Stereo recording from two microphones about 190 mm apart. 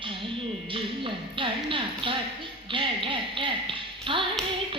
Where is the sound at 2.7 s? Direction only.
25° right (ahead or behind).